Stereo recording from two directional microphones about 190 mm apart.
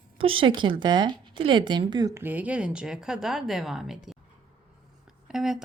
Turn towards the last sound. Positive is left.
turn(degrees=0)  # may be behind; listen again after turning